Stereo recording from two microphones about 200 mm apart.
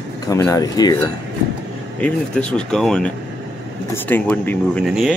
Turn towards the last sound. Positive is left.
turn(degrees=0)  # may be behind; listen again after turning